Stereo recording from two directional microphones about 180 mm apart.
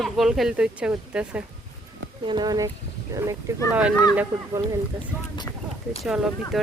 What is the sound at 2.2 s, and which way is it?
Speech, 25° right (ahead or behind).